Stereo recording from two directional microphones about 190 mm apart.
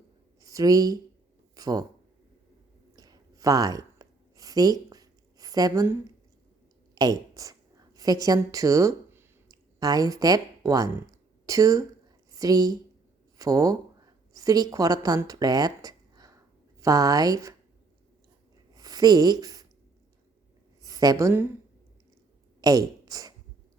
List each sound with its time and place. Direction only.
0.4 s a woman's voice: 20° right (ahead or behind)
2.9 s a sound: 20° right (ahead or behind)
13.4 s a woman's voice: 20° right (ahead or behind)
18.7 s a sound: 20° right (ahead or behind)
20.8 s a woman's voice: 20° right (ahead or behind)
22.6 s speech: 20° right (ahead or behind)